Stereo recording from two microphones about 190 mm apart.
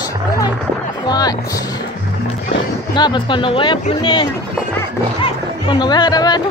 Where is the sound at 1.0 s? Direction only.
20° left (ahead or behind).